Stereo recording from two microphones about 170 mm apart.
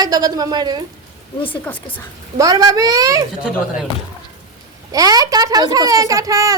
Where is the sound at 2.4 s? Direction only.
20° right (ahead or behind).